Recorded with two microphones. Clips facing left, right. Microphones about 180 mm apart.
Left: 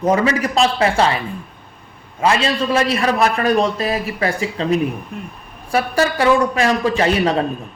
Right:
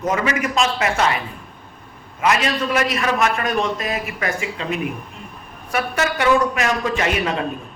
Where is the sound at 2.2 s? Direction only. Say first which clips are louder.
Left 2 dB; 30° left (ahead or behind).